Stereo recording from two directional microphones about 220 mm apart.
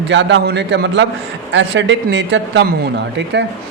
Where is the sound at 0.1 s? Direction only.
55° right (ahead or behind).